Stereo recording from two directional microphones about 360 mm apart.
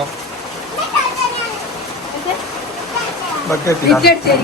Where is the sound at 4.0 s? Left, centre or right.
Left.